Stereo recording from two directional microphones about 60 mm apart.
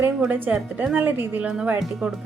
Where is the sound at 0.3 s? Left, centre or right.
Right.